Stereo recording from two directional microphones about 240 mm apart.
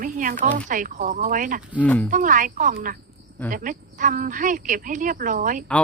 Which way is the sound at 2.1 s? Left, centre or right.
Right.